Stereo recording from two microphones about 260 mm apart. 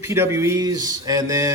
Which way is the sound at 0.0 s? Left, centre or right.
Centre.